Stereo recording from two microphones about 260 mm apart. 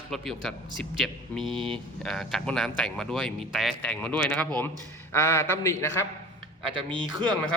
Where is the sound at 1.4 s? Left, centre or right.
Centre.